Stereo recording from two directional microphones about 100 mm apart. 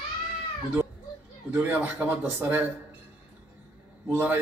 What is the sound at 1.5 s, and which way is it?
Speech, 15° right (ahead or behind).